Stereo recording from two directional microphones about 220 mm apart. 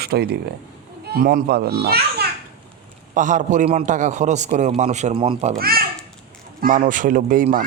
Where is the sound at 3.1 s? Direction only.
35° right (ahead or behind).